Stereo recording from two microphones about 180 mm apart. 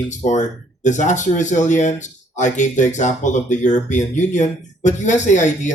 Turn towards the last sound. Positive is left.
turn(degrees=40)  # may be behind; listen again after turning